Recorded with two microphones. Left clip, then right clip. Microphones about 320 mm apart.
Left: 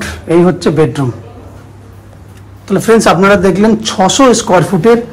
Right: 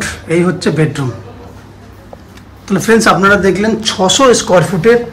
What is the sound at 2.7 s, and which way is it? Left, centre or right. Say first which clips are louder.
Speech: left 2 dB; centre.